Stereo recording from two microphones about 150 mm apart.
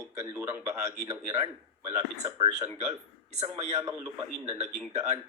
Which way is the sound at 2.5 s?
50° right (ahead or behind).